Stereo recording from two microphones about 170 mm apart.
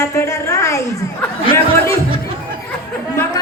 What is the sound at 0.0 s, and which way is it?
Chatter, 20° left (ahead or behind).